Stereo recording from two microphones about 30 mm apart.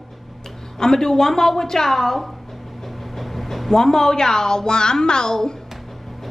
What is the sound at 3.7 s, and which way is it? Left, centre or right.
A woman's voice, centre.